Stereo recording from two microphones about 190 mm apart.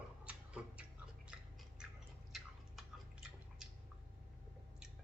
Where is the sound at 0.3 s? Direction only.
5° right (ahead or behind).